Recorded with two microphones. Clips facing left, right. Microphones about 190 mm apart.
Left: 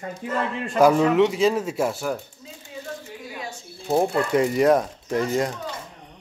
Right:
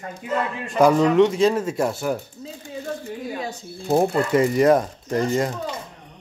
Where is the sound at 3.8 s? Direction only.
5° right (ahead or behind).